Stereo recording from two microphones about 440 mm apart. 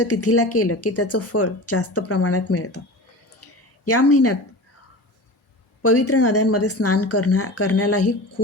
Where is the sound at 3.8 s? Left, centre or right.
Left.